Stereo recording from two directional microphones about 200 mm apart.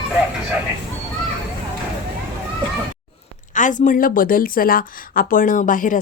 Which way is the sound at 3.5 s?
40° left (ahead or behind).